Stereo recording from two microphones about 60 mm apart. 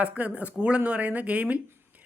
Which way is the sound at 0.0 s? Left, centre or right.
Right.